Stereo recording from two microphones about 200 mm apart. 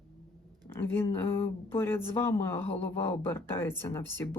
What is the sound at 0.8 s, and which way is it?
Speech, 10° left (ahead or behind).